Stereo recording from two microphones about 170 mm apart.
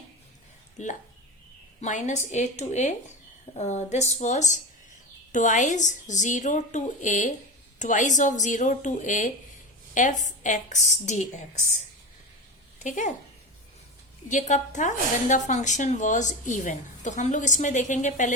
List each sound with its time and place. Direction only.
0.8 s a woman's voice: 45° left (ahead or behind)
12.8 s speech: 45° left (ahead or behind)
14.3 s a woman's voice: 45° left (ahead or behind)